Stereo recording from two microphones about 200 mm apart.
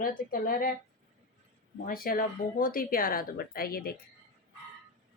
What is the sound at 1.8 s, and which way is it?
Speech, 45° left (ahead or behind).